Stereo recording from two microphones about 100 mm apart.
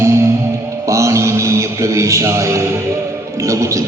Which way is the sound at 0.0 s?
30° right (ahead or behind).